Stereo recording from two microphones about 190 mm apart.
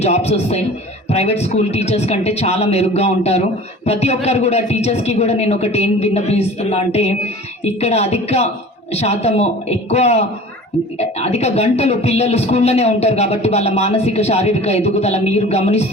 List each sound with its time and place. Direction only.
0.0 s a man's voice: 35° left (ahead or behind)